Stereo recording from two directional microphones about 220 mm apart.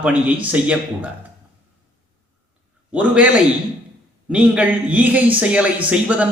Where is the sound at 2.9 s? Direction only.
5° right (ahead or behind).